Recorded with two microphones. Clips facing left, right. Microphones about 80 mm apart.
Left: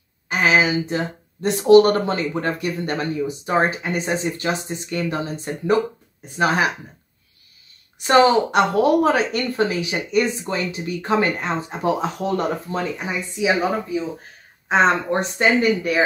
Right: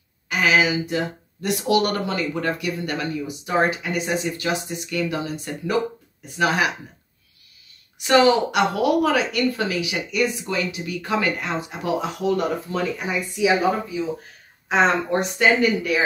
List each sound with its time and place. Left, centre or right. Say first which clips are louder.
0.3 s speech: left 1 dB; left
8.0 s speech: left 2 dB; left
14.7 s speech: left 2 dB; left